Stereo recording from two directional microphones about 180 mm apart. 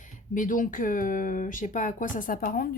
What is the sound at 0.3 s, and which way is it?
Speech, 45° left (ahead or behind).